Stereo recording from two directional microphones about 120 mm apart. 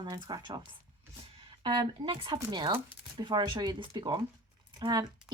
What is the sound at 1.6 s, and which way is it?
Speech, 45° right (ahead or behind).